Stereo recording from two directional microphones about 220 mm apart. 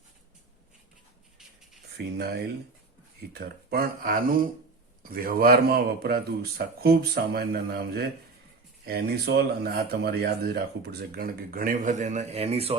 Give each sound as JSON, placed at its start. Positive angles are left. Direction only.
{"t": 2.0, "sound": "a man's voice", "side_deg": -45}